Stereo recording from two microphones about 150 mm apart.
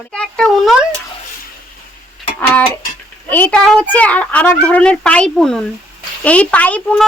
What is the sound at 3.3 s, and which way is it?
A child's voice, 10° left (ahead or behind).